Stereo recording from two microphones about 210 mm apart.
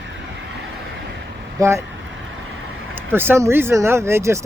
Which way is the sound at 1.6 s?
15° right (ahead or behind).